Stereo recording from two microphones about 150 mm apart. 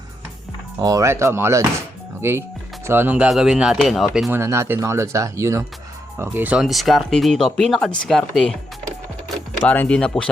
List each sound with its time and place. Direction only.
0.8 s speech: 20° right (ahead or behind); by 4.3 s centre (ahead or behind)
4.3 s speech: 15° right (ahead or behind); by 8.5 s 5° left (ahead or behind)
9.6 s speech: 10° left (ahead or behind)